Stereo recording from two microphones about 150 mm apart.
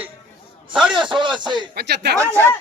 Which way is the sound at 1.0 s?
30° right (ahead or behind).